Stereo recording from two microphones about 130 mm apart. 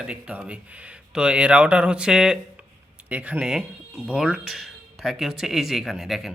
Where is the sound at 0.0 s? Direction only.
10° right (ahead or behind).